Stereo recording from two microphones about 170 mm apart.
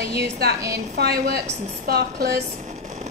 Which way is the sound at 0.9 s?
70° right (ahead or behind).